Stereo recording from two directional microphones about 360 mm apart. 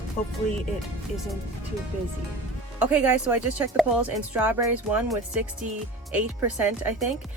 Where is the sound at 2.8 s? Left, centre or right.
Centre.